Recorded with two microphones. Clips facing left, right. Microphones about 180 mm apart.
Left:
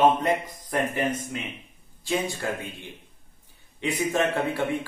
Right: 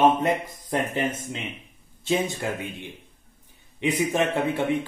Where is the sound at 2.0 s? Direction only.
20° right (ahead or behind).